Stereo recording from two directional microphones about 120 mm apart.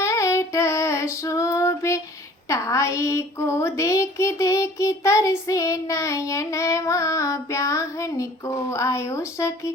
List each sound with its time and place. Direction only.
0.0 s female singing: 25° left (ahead or behind)
2.5 s child singing: 25° left (ahead or behind)